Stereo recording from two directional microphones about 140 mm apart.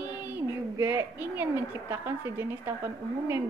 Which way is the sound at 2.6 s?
20° right (ahead or behind).